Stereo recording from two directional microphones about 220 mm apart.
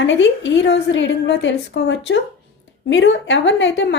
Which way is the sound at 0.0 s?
55° left (ahead or behind).